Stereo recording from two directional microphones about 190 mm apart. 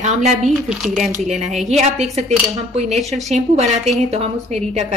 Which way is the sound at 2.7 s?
35° right (ahead or behind).